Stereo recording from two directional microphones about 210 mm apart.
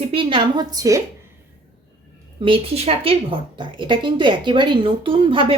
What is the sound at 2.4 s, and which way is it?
A woman's voice, 25° right (ahead or behind).